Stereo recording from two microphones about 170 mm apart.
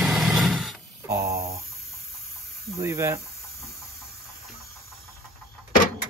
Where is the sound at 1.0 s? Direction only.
15° right (ahead or behind).